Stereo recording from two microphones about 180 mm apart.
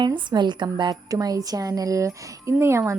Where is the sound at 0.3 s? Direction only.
25° right (ahead or behind).